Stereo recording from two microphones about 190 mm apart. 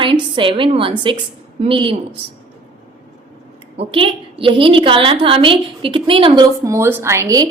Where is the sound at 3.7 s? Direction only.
30° right (ahead or behind).